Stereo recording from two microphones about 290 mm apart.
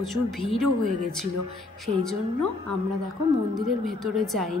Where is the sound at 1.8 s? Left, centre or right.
Centre.